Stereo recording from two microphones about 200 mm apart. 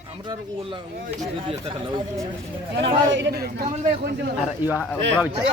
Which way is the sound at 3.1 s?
65° right (ahead or behind).